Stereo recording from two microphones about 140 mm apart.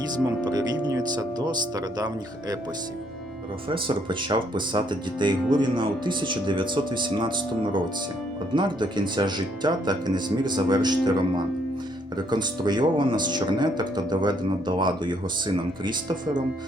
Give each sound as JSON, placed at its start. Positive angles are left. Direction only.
{"t": 0.3, "sound": "speech", "side_deg": -30}
{"t": 3.7, "sound": "speech", "side_deg": -35}